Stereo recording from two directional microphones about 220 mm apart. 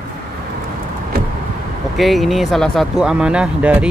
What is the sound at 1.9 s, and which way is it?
Speech, centre (ahead or behind).